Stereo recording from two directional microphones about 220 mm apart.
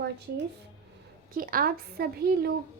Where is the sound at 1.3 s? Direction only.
40° right (ahead or behind).